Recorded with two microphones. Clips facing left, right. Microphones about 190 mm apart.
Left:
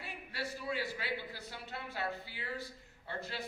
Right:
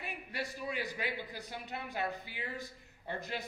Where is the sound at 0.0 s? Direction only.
15° right (ahead or behind).